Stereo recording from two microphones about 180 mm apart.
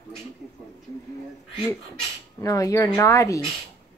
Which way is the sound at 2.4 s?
20° left (ahead or behind).